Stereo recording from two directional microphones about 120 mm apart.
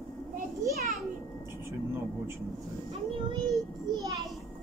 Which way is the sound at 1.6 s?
20° right (ahead or behind).